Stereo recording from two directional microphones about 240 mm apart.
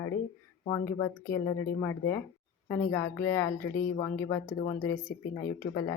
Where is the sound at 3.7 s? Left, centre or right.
Left.